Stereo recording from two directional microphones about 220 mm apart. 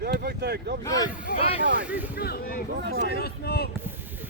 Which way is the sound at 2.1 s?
45° left (ahead or behind).